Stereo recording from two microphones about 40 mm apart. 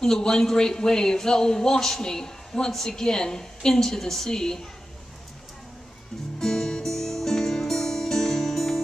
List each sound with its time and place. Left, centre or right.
0.0 s a man's voice: centre
6.4 s music: centre